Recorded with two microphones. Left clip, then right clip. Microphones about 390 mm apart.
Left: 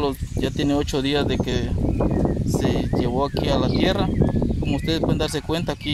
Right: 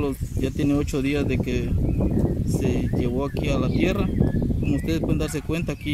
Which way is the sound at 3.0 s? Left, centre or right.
Centre.